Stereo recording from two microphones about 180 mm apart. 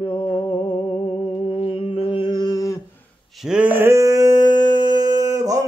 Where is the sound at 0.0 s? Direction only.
30° left (ahead or behind).